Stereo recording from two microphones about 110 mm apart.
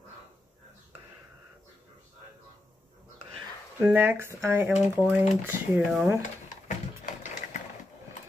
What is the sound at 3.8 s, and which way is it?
Speech, 15° right (ahead or behind).